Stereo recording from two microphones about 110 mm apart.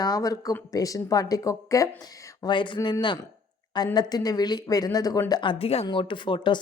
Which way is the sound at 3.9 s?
35° left (ahead or behind).